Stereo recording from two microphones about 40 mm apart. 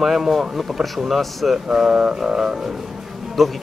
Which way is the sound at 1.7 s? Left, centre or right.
Centre.